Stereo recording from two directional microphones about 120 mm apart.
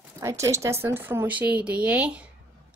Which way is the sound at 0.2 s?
25° right (ahead or behind).